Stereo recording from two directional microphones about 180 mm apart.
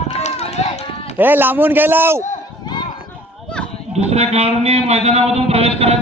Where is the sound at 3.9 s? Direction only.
35° right (ahead or behind).